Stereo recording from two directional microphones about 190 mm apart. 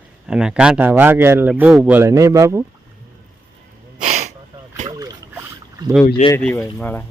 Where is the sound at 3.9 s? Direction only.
35° right (ahead or behind).